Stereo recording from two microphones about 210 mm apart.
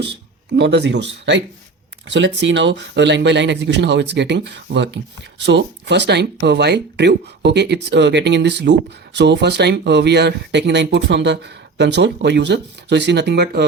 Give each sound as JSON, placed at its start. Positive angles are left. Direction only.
{"t": 0.5, "sound": "speech", "side_deg": -55}